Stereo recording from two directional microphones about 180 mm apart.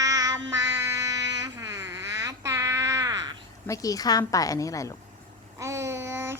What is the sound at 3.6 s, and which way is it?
A woman's voice, 20° left (ahead or behind).